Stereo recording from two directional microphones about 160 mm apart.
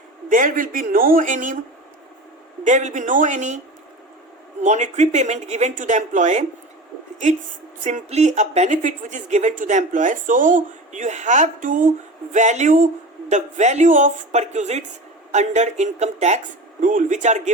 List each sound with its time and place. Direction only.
0.3 s speech: 55° right (ahead or behind)
2.6 s speech: 50° right (ahead or behind)
4.6 s speech: 50° right (ahead or behind)
7.9 s speech: 45° right (ahead or behind)